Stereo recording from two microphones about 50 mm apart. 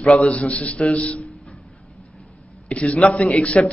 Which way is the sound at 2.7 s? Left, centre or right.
Left.